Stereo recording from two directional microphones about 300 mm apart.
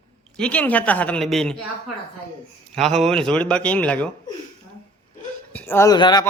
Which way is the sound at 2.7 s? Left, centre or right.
Centre.